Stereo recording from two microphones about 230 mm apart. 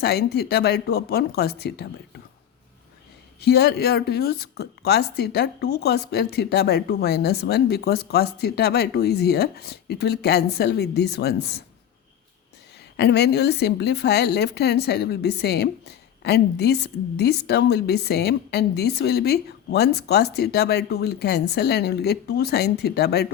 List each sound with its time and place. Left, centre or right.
0.0 s a woman's voice: left
3.4 s a woman's voice: left
13.0 s a woman's voice: left